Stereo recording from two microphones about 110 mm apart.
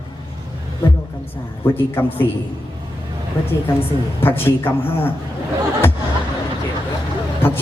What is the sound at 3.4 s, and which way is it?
A man's voice, 20° left (ahead or behind).